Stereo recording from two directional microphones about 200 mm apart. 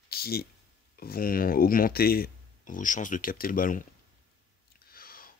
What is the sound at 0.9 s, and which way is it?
Speech, 50° left (ahead or behind).